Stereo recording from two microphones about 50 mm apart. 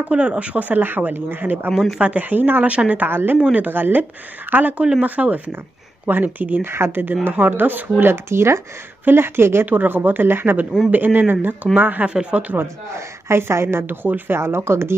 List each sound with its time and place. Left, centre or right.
0.1 s speech: right
2.0 s speech: right
2.2 s speech: right
3.1 s a woman's voice: right
6.6 s a woman's voice: right
8.0 s a woman's voice: right
9.7 s speech: right
12.1 s speech: right
13.4 s a woman's voice: right
14.4 s speech: right